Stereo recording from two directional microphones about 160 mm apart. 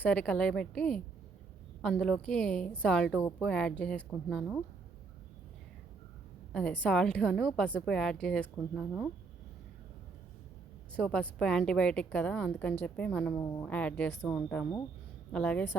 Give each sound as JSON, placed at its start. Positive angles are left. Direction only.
{"t": 0.0, "sound": "a woman's voice", "side_deg": 5}
{"t": 6.5, "sound": "a woman's voice", "side_deg": 5}
{"t": 10.9, "sound": "a woman's voice", "side_deg": 5}
{"t": 13.3, "sound": "speech", "side_deg": 20}
{"t": 13.6, "sound": "a woman's voice", "side_deg": 10}